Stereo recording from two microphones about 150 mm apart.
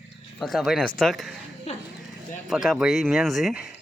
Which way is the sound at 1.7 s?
45° left (ahead or behind).